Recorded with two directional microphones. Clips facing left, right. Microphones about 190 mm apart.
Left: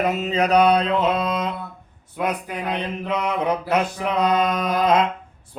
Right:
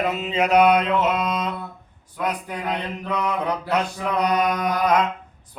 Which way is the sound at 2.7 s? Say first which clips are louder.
Left 3 dB; 20° left (ahead or behind).